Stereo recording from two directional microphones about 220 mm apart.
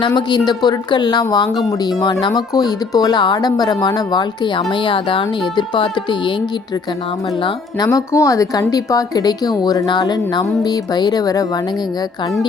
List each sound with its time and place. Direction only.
0.0 s speech: 20° left (ahead or behind)
7.4 s speech: 15° left (ahead or behind)